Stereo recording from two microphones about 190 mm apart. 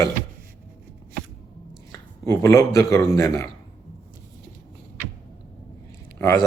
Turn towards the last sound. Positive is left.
turn(degrees=10)  # may be behind; listen again after turning